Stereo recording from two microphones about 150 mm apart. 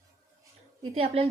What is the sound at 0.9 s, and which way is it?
Speech, 40° right (ahead or behind).